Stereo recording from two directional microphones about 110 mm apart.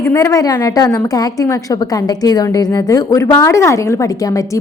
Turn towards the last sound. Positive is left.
turn(degrees=30)  # may be behind; listen again after turning